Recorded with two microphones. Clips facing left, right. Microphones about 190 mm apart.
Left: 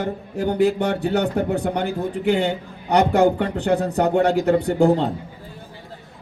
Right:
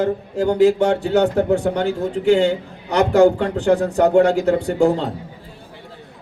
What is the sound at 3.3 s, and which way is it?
Speech, 60° left (ahead or behind).